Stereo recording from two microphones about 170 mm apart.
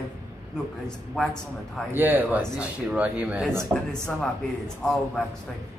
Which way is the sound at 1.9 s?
10° right (ahead or behind).